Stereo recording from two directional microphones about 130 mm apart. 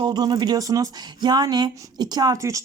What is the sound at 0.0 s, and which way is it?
Speech, 35° right (ahead or behind).